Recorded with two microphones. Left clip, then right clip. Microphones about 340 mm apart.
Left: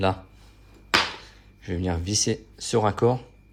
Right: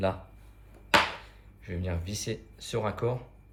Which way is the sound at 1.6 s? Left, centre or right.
Centre.